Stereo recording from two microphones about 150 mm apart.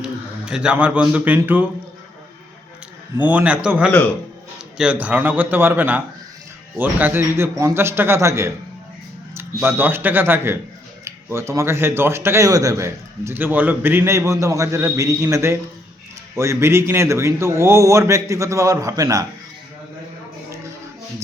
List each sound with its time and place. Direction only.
0.0 s a man's voice: 5° right (ahead or behind)
3.2 s speech: 10° right (ahead or behind)
7.0 s a man's voice: 15° right (ahead or behind)